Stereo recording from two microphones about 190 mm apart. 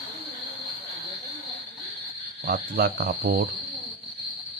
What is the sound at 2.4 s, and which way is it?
Speech, 50° right (ahead or behind).